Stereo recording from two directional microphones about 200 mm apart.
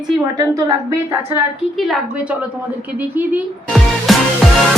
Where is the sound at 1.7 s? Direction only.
Centre (ahead or behind).